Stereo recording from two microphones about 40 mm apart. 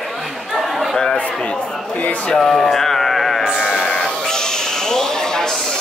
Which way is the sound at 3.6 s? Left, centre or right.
Left.